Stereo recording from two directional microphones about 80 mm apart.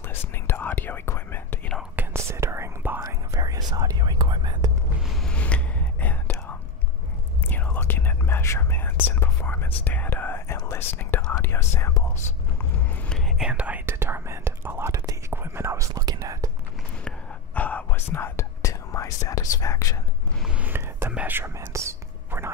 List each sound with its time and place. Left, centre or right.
0.1 s whispering: left
2.1 s whispering: right
3.0 s whispering: right
5.2 s whispering: centre
7.4 s whispering: left
13.4 s whispering: centre
13.8 s whispering: right
14.9 s whispering: right
15.3 s whispering: right
15.9 s whispering: right
17.6 s whispering: centre; by 20.0 s left
20.4 s a sound: centre
21.1 s whispering: right
21.5 s whispering: right